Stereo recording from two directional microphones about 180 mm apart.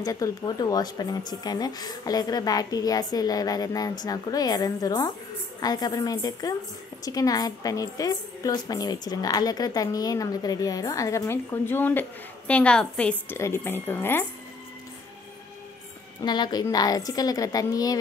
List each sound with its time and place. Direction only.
0.0 s a woman's voice: 20° left (ahead or behind)
16.2 s a woman's voice: 25° left (ahead or behind)